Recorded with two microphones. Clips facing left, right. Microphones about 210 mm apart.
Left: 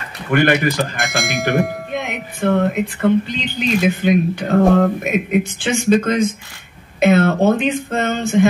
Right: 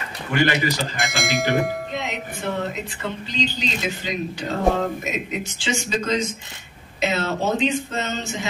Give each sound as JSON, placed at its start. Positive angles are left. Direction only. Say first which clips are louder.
{"t": 0.3, "sound": "speech", "louder": "left 6 dB", "side_deg": 55}
{"t": 0.9, "sound": "speech", "louder": "left 2 dB", "side_deg": 0}
{"t": 1.9, "sound": "speech", "louder": "left 4 dB", "side_deg": 55}